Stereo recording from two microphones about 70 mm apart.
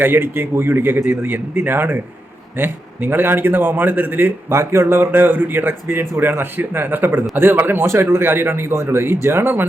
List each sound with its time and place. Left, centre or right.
0.0 s a man's voice: right